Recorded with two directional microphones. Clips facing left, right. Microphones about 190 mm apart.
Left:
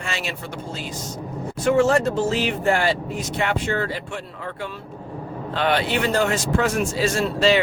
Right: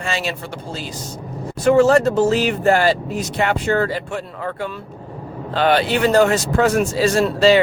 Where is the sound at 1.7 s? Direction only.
40° right (ahead or behind).